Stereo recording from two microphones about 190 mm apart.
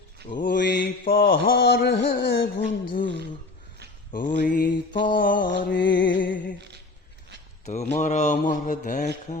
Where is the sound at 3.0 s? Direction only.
70° left (ahead or behind).